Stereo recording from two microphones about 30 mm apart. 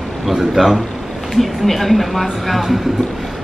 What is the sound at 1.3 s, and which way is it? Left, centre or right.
Speech, centre.